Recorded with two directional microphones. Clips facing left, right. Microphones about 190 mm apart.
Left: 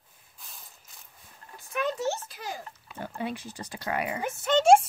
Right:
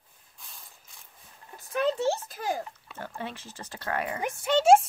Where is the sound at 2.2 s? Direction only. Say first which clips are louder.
Right 7 dB; 50° right (ahead or behind).